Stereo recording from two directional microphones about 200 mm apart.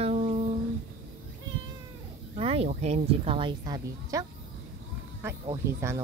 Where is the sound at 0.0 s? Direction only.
30° right (ahead or behind).